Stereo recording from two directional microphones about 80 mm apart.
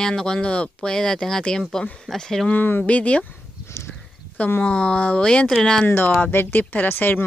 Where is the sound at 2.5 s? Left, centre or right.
Left.